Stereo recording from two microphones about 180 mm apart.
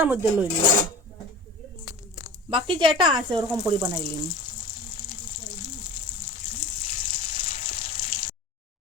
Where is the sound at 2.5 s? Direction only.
25° right (ahead or behind).